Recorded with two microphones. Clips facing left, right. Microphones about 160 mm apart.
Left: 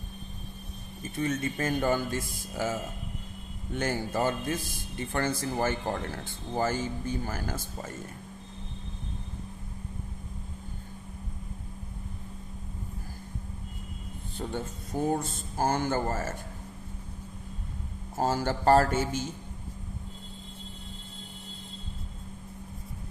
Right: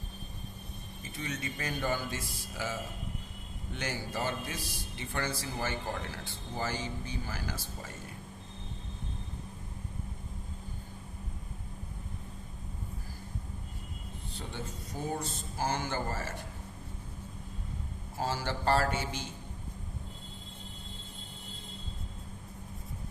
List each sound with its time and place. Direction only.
1.1 s speech: 50° left (ahead or behind)
15.1 s speech: 50° left (ahead or behind)
18.2 s speech: 45° left (ahead or behind)